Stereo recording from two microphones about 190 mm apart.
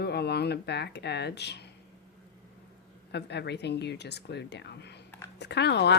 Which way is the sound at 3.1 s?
65° left (ahead or behind).